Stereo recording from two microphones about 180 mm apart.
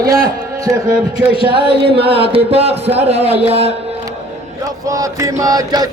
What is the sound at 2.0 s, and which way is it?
Music, 30° right (ahead or behind).